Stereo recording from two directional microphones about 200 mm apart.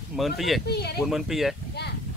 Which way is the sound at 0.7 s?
55° left (ahead or behind).